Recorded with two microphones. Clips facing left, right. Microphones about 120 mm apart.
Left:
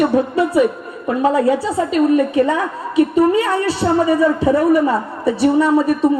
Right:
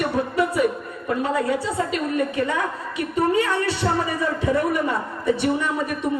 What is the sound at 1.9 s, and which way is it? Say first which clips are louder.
A woman's voice: left 9 dB; 30° left (ahead or behind).